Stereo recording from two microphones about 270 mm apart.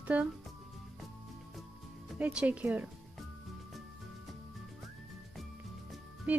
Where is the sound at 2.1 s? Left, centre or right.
Centre.